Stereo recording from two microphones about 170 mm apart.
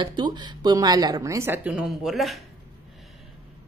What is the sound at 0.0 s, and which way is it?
Speech, 25° right (ahead or behind).